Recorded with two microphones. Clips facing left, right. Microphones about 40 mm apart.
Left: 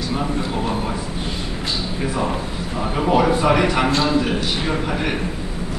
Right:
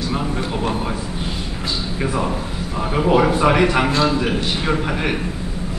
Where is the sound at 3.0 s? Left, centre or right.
Centre.